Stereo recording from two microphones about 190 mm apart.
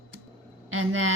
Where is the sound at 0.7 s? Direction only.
90° right.